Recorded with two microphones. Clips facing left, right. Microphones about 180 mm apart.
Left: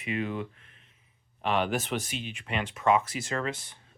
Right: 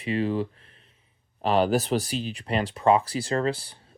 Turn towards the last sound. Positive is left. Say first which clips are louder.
# right 7 dB
turn(degrees=-35)  # may be behind; listen again after turning